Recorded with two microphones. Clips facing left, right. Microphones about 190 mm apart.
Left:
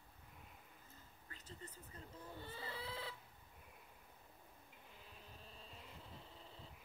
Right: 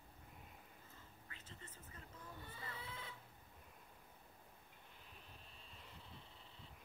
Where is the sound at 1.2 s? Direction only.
40° left (ahead or behind).